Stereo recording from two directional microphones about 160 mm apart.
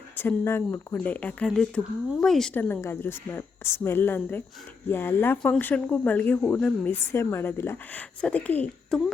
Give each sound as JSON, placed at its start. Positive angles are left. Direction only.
{"t": 0.2, "sound": "speech", "side_deg": 15}
{"t": 2.6, "sound": "speech", "side_deg": 15}